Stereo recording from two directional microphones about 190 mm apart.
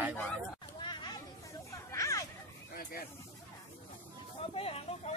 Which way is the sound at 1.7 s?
15° left (ahead or behind).